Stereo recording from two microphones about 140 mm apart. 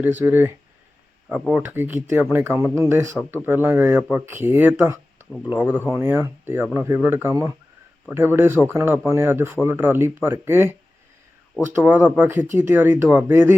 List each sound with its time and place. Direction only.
0.0 s speech: 15° right (ahead or behind)